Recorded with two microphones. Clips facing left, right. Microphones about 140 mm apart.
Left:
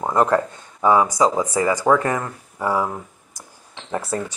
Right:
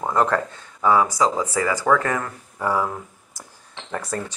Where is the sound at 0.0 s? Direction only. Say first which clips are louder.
Left 3 dB; 10° left (ahead or behind).